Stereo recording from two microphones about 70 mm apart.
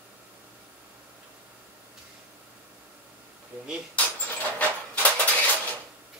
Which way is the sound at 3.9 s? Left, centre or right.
Left.